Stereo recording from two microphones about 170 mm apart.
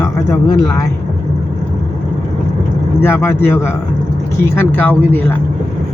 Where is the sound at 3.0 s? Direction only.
15° left (ahead or behind).